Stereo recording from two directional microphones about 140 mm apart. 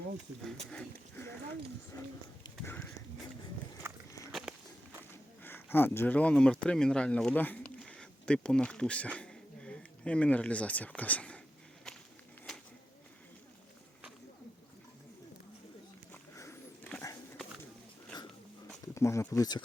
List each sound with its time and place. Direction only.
0.7 s speech: 10° left (ahead or behind)
1.9 s speech: 25° left (ahead or behind)
2.6 s speech: 10° left (ahead or behind)
3.9 s walk: 20° right (ahead or behind)
4.3 s walk: 5° right (ahead or behind)
5.4 s speech: 15° left (ahead or behind)
16.3 s a sound: 20° left (ahead or behind)
18.9 s speech: 20° left (ahead or behind)